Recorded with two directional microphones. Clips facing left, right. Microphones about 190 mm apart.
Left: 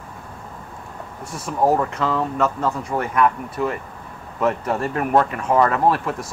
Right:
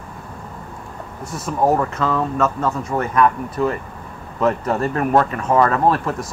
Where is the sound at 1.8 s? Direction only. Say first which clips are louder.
Right 1 dB; 15° left (ahead or behind).